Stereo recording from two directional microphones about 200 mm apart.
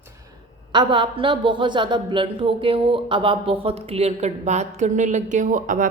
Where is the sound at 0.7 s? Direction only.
25° right (ahead or behind).